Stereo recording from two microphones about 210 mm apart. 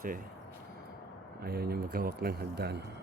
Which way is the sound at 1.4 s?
45° right (ahead or behind).